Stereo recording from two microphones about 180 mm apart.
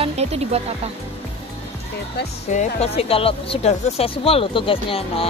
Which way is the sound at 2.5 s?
40° left (ahead or behind).